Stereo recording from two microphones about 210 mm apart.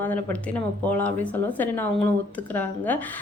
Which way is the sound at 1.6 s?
10° left (ahead or behind).